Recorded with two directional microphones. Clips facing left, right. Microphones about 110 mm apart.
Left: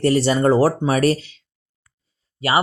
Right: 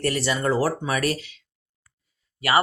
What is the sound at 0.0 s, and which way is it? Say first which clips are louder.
Speech: left 8 dB; 30° left (ahead or behind).